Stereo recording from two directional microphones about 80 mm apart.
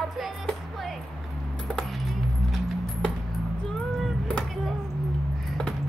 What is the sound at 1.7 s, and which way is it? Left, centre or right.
Keys jangling, centre.